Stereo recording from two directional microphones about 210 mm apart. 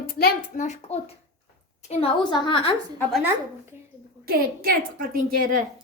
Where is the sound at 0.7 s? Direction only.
30° left (ahead or behind).